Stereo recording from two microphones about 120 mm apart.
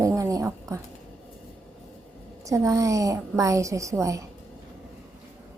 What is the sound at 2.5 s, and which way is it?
A woman's voice, 30° right (ahead or behind).